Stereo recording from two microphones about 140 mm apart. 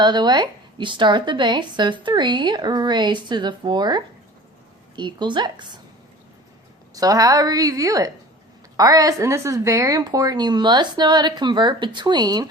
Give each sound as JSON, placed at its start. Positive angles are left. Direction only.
{"t": 0.0, "sound": "speech", "side_deg": -30}
{"t": 6.9, "sound": "a woman's voice", "side_deg": -25}